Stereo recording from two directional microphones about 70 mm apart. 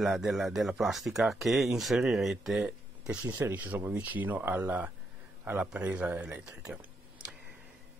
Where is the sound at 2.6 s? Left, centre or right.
Centre.